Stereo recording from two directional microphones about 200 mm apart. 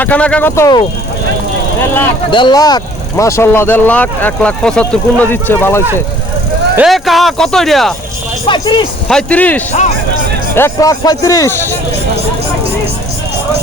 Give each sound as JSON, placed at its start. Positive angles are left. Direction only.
{"t": 0.0, "sound": "speech", "side_deg": 5}
{"t": 2.3, "sound": "speech", "side_deg": 20}
{"t": 6.7, "sound": "speech", "side_deg": 0}
{"t": 8.4, "sound": "speech", "side_deg": 25}
{"t": 9.0, "sound": "speech", "side_deg": 5}